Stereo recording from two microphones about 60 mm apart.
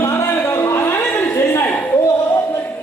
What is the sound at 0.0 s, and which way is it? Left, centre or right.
Music, left.